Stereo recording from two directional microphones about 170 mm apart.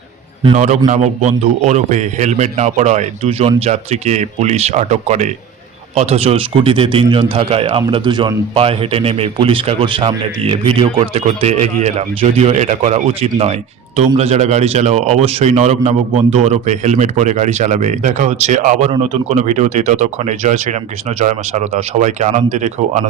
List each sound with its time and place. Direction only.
0.5 s speech: 45° right (ahead or behind)